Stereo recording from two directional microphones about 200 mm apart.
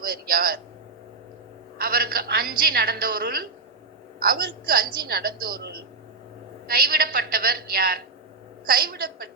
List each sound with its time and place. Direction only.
0.0 s a woman's voice: 45° right (ahead or behind)
1.8 s a woman's voice: 50° right (ahead or behind)